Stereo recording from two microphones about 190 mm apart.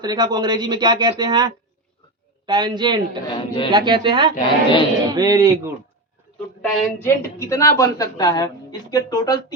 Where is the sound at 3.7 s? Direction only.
25° right (ahead or behind).